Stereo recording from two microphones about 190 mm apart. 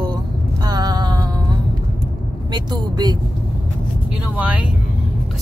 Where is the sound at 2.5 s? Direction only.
20° right (ahead or behind).